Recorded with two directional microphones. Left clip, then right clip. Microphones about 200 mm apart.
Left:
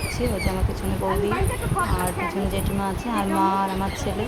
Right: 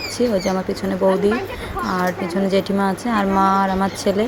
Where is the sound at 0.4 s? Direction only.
20° right (ahead or behind).